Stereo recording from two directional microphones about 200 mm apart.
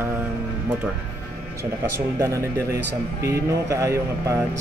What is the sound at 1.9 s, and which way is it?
Music, 15° right (ahead or behind).